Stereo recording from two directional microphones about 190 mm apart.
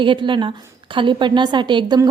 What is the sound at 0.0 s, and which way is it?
A woman's voice, 25° right (ahead or behind).